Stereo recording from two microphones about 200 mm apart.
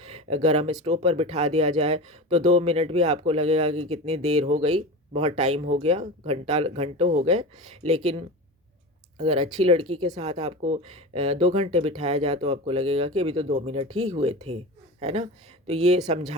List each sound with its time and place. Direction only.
0.0 s speech: 30° right (ahead or behind)